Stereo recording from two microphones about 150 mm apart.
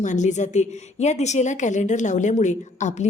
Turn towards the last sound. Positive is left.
turn(degrees=50)  # may be behind; listen again after turning